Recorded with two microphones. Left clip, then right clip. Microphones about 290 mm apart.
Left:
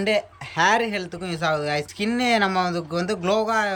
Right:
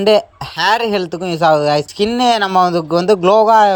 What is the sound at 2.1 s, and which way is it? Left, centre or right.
Speech, centre.